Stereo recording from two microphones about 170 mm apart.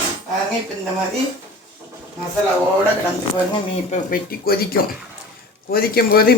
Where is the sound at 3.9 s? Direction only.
60° left (ahead or behind).